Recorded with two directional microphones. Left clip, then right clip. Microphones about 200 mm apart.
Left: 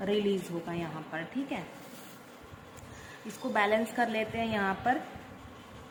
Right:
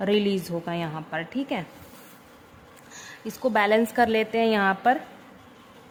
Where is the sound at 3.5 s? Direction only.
55° right (ahead or behind).